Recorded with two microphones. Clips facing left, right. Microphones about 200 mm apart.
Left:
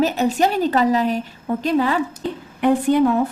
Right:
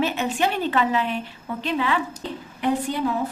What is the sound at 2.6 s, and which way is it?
Speech, 55° left (ahead or behind).